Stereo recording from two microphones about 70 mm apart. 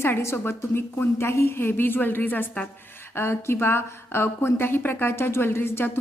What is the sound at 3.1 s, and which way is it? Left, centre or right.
A woman's voice, left.